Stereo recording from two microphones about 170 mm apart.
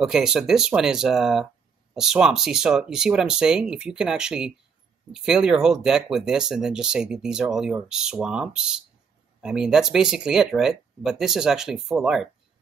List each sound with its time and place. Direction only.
0.0 s speech: 5° right (ahead or behind)